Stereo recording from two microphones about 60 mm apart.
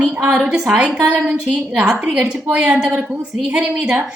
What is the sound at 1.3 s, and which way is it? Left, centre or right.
A woman's voice, centre.